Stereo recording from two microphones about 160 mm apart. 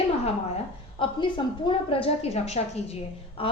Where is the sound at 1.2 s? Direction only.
30° left (ahead or behind).